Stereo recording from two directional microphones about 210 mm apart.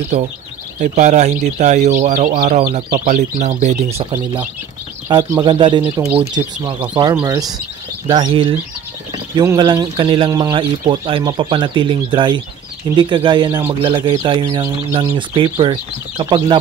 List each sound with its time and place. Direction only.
0.1 s speech: 40° right (ahead or behind)
5.0 s speech: 20° right (ahead or behind)